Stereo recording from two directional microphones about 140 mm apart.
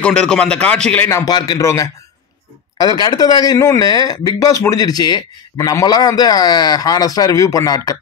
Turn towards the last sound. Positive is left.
turn(degrees=25)  # may be behind; listen again after turning